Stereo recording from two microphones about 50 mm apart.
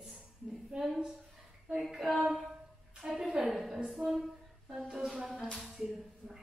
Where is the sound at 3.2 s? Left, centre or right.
Centre.